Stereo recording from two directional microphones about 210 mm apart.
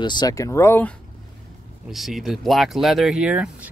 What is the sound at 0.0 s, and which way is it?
Speech, 20° left (ahead or behind).